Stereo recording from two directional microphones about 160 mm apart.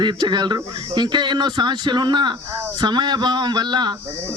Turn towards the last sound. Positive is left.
turn(degrees=-25)  # may be behind; listen again after turning